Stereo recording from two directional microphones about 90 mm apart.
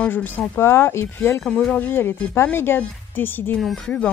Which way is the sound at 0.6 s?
25° left (ahead or behind).